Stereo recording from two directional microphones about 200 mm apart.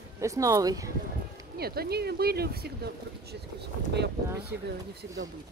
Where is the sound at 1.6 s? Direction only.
50° right (ahead or behind).